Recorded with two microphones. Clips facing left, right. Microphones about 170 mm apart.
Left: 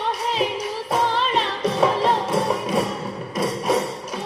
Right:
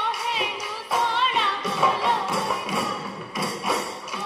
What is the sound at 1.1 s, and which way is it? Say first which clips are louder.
Music: left 3 dB; 30° left (ahead or behind).